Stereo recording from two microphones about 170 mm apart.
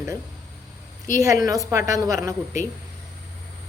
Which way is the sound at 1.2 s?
20° right (ahead or behind).